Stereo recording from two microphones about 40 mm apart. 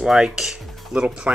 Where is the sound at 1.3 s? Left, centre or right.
Right.